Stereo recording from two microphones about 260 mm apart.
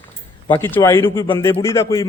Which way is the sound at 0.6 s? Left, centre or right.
Centre.